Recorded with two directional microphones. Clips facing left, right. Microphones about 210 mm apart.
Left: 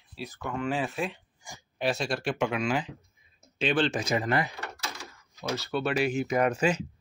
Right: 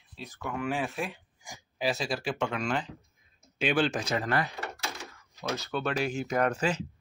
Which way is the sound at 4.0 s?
10° left (ahead or behind).